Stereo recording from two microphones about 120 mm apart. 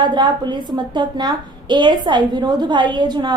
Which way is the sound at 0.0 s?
40° right (ahead or behind).